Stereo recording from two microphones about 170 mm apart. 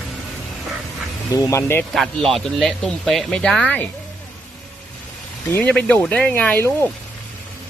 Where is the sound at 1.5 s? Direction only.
15° left (ahead or behind).